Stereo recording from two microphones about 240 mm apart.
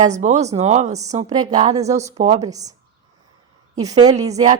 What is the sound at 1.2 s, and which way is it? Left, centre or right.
Speech, centre.